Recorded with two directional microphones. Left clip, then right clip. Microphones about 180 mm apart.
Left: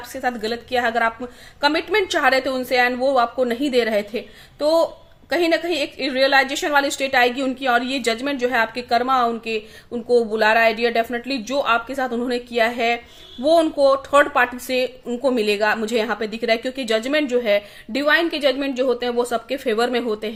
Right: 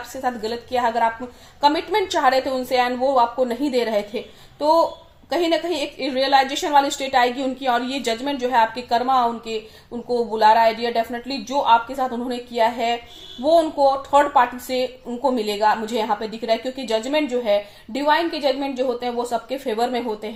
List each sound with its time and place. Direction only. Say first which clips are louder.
0.1 s a woman's voice: left 1 dB; 45° left (ahead or behind)